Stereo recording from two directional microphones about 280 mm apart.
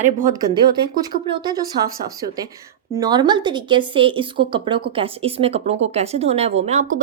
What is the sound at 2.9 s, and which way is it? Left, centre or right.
A woman's voice, centre.